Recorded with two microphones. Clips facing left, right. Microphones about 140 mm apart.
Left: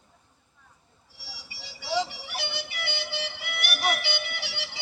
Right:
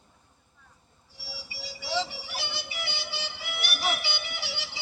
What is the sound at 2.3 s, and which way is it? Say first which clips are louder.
Music: left 2 dB; 60° left (ahead or behind).